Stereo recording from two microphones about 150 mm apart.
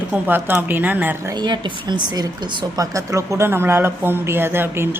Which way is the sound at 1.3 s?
30° right (ahead or behind).